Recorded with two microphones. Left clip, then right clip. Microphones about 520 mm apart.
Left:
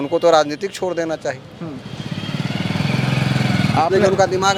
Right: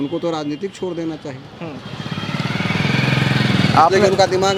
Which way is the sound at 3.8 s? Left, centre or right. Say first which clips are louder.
Right 4 dB; centre.